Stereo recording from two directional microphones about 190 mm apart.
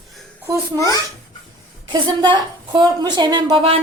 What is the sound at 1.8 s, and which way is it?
A woman's voice, 25° right (ahead or behind).